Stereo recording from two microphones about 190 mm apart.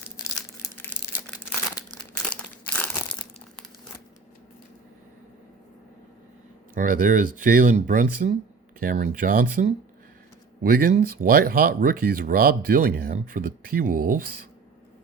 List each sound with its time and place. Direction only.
1.3 s crumpling: 15° left (ahead or behind)
6.7 s speech: 45° right (ahead or behind)